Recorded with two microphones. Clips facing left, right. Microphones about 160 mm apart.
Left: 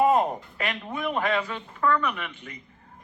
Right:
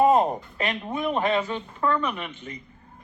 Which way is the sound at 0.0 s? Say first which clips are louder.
Right 2 dB; 30° right (ahead or behind).